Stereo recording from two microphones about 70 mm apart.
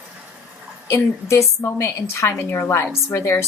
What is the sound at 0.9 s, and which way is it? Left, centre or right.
A woman's voice, left.